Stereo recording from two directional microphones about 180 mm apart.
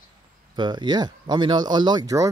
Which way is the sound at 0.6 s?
25° right (ahead or behind).